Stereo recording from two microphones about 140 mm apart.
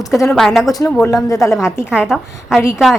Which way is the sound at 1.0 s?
20° left (ahead or behind).